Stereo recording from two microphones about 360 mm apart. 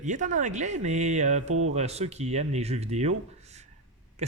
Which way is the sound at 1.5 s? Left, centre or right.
Right.